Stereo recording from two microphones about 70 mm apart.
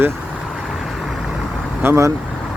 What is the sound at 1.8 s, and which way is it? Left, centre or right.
Speech, right.